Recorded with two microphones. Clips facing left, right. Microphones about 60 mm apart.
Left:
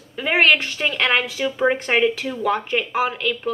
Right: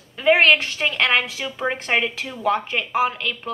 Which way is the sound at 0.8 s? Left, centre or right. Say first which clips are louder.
Even; centre.